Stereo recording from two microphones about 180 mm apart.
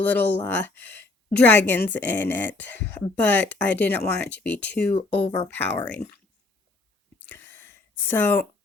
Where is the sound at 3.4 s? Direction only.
80° left.